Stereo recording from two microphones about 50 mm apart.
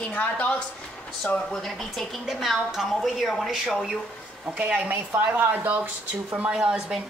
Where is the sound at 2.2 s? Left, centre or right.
Centre.